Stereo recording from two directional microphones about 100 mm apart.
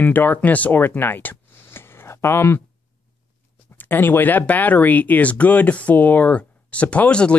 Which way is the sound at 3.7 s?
20° left (ahead or behind).